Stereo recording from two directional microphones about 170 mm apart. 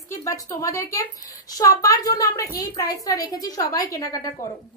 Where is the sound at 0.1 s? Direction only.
15° left (ahead or behind).